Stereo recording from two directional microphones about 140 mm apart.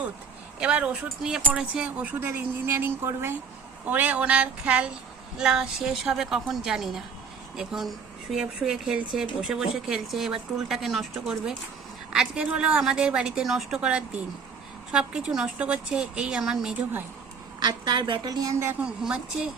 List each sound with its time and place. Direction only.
0.6 s a woman's voice: 10° right (ahead or behind)
12.1 s a woman's voice: 5° right (ahead or behind)
17.6 s a woman's voice: 35° right (ahead or behind); by 18.9 s 15° right (ahead or behind)
19.0 s a woman's voice: 5° right (ahead or behind)